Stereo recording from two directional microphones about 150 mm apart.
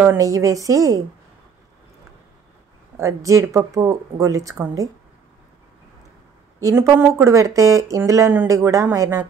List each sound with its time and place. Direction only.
0.0 s speech: 20° right (ahead or behind)
3.0 s speech: 20° right (ahead or behind)
6.6 s a woman's voice: 20° right (ahead or behind)